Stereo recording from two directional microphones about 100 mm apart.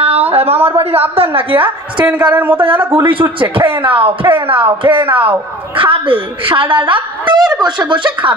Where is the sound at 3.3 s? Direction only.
60° right (ahead or behind).